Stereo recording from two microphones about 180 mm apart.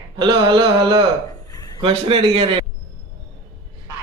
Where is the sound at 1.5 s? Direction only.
20° left (ahead or behind).